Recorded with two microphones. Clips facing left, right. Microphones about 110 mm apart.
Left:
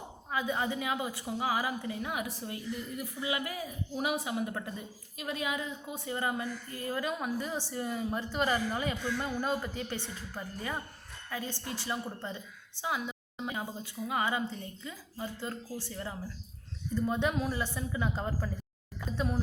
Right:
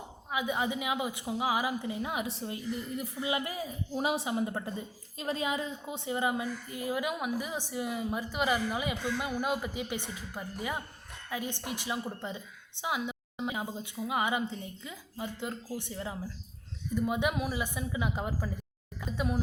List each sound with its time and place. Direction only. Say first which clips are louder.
0.3 s a woman's voice: right 1 dB; 15° right (ahead or behind)